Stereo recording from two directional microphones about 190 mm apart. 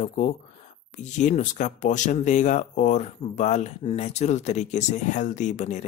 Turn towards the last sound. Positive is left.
turn(degrees=40)  # may be behind; listen again after turning